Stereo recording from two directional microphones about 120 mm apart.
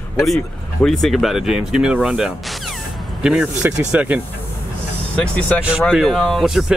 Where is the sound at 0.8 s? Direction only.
Centre (ahead or behind).